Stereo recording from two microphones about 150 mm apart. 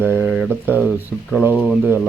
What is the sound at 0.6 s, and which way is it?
Speech, 10° right (ahead or behind).